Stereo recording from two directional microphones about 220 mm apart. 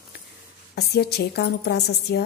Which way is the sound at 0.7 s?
50° left (ahead or behind).